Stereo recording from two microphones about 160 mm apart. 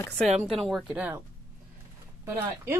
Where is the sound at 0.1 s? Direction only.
5° left (ahead or behind).